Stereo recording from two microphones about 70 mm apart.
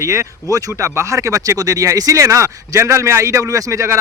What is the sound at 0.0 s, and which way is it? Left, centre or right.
Speech, right.